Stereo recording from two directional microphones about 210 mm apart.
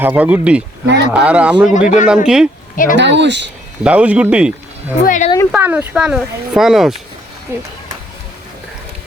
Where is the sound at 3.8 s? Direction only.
5° right (ahead or behind).